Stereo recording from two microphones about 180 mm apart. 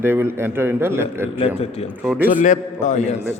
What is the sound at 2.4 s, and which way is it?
Speech, 45° left (ahead or behind).